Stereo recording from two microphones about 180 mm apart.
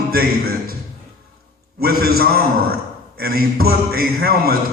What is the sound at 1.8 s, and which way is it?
A man's voice, 55° right (ahead or behind).